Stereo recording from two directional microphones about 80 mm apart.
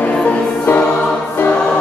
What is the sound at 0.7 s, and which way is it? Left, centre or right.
Choir, left.